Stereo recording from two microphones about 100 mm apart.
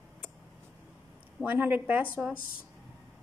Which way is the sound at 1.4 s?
20° right (ahead or behind).